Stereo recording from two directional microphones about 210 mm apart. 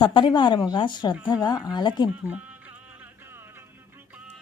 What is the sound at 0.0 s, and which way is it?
A woman's voice, 20° left (ahead or behind).